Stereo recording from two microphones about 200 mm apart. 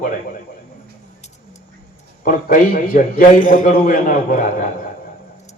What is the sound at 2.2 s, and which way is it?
A man's voice, 45° left (ahead or behind).